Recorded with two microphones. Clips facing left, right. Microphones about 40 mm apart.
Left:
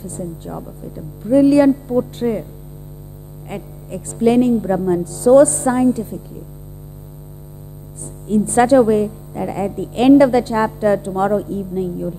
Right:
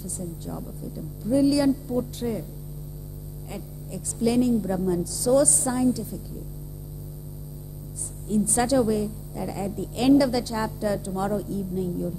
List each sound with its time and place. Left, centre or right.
0.0 s a woman's voice: left
3.4 s a woman's voice: left
8.3 s a woman's voice: left